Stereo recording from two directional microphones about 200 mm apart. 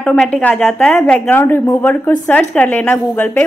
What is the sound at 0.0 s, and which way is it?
A woman's voice, 5° left (ahead or behind).